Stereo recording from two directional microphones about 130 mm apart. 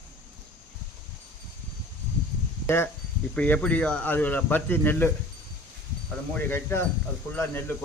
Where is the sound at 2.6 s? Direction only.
20° left (ahead or behind).